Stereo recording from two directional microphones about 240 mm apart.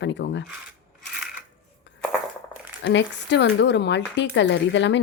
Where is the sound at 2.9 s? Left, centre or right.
Left.